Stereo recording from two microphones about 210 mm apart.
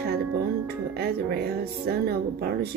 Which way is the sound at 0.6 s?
50° right (ahead or behind).